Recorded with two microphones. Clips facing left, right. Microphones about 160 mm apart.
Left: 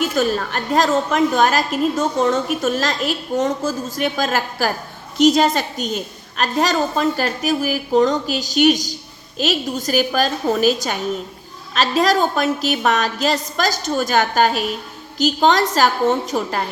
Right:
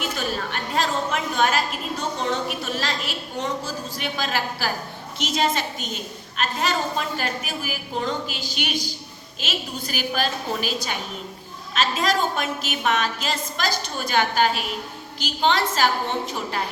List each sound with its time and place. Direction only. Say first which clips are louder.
0.2 s a woman's voice: left 8 dB; 40° left (ahead or behind)